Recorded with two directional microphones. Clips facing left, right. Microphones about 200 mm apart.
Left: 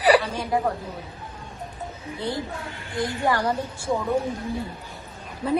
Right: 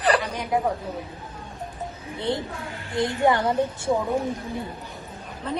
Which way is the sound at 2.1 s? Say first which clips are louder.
Right 2 dB; 25° right (ahead or behind).